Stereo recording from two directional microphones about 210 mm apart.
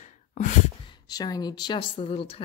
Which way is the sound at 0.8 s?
20° left (ahead or behind).